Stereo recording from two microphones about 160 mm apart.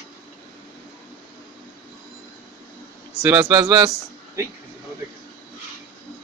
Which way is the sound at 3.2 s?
25° right (ahead or behind).